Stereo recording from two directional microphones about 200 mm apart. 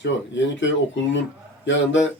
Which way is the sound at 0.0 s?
65° left (ahead or behind).